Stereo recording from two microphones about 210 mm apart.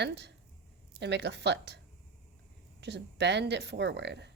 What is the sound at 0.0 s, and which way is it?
Speech, 55° right (ahead or behind).